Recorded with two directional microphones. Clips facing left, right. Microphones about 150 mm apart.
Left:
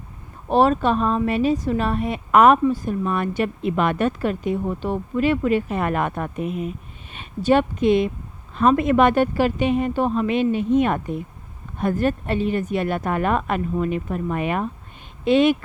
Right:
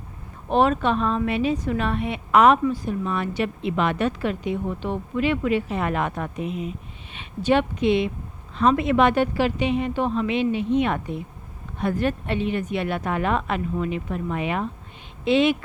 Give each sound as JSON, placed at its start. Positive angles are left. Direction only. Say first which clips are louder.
{"t": 0.5, "sound": "a woman's voice", "louder": "left 2 dB", "side_deg": 35}